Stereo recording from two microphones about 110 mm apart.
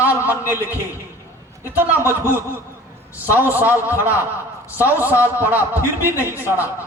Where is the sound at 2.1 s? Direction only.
20° right (ahead or behind).